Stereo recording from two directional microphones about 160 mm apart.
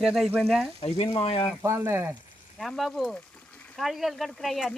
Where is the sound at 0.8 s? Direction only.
35° left (ahead or behind).